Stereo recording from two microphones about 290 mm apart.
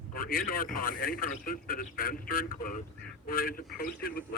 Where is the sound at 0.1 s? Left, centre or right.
Left.